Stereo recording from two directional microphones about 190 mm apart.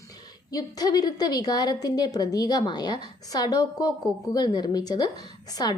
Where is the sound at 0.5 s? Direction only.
20° left (ahead or behind).